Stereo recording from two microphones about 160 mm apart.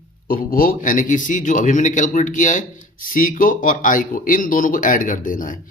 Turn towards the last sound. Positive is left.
turn(degrees=55)  # may be behind; listen again after turning